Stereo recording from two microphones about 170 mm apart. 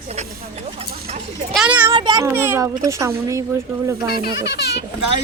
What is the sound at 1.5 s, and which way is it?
Speech, 5° right (ahead or behind).